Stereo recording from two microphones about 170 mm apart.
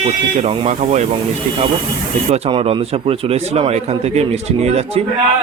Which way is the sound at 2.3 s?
35° right (ahead or behind).